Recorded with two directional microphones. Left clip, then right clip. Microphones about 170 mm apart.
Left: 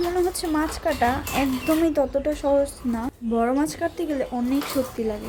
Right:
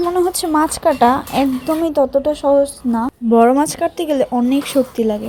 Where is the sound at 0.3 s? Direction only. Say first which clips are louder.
Right 9 dB; 40° right (ahead or behind); by 2.6 s 25° right (ahead or behind).